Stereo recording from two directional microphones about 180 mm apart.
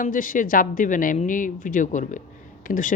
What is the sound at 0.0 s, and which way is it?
Speech, 50° left (ahead or behind).